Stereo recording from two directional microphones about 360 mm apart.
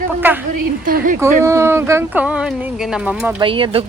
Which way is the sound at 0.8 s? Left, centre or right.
Right.